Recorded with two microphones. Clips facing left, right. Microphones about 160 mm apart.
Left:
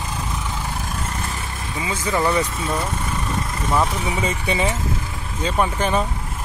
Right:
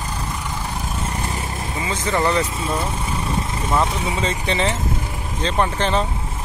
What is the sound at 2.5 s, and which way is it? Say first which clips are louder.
Speech: right 1 dB; 5° right (ahead or behind).